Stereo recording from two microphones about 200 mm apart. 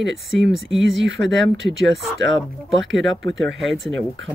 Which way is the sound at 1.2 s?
65° right (ahead or behind).